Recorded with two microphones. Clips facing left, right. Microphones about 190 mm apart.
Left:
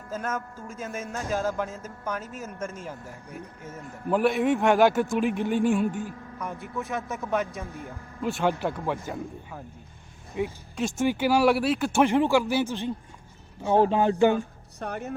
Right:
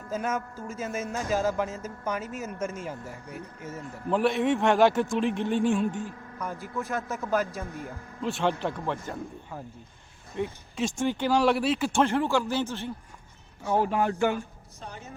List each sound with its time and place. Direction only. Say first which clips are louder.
0.1 s a man's voice: right 2 dB; 10° right (ahead or behind)
11.9 s speech: left 5 dB; 15° left (ahead or behind)
14.8 s speech: left 9 dB; 60° left (ahead or behind)